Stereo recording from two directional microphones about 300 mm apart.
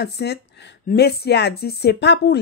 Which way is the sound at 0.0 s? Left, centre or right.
Left.